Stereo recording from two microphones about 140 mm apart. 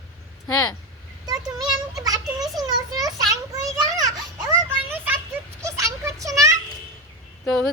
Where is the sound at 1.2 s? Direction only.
30° right (ahead or behind).